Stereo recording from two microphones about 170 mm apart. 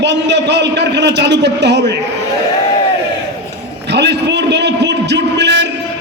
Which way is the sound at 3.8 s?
90° right.